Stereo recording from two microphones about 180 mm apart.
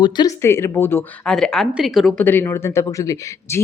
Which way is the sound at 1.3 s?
Centre (ahead or behind).